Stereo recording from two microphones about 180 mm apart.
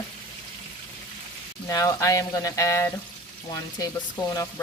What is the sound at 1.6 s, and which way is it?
Speech, 15° left (ahead or behind).